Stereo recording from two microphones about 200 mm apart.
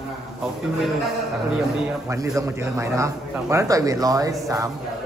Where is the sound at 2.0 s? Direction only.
15° right (ahead or behind).